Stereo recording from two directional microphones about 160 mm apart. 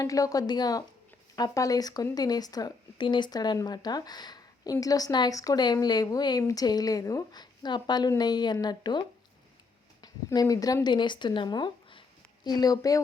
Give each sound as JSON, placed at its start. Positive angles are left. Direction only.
{"t": 0.0, "sound": "speech", "side_deg": 20}